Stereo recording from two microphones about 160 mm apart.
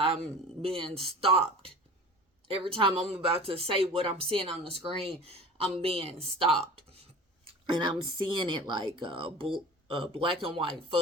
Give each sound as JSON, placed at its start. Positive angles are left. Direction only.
{"t": 0.6, "sound": "speech", "side_deg": -35}
{"t": 6.7, "sound": "a sound", "side_deg": -40}
{"t": 7.7, "sound": "speech", "side_deg": -30}